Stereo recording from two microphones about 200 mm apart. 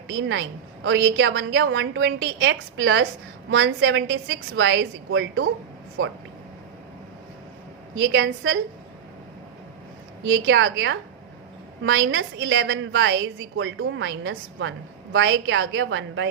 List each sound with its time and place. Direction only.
0.1 s a woman's voice: 70° right (ahead or behind)
7.9 s a woman's voice: 65° right (ahead or behind)
10.2 s a woman's voice: 65° right (ahead or behind)